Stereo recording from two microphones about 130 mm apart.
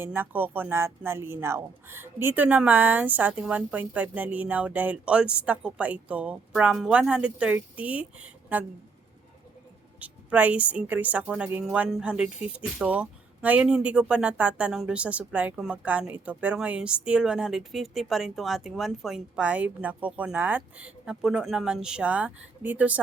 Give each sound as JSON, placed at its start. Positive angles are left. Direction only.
{"t": 0.0, "sound": "speech", "side_deg": -15}
{"t": 10.0, "sound": "speech", "side_deg": -10}